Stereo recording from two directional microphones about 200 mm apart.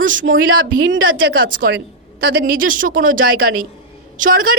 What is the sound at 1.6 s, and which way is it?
A woman's voice, 55° right (ahead or behind).